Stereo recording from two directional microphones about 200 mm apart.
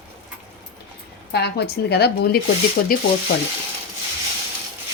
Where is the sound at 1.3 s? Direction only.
55° left (ahead or behind).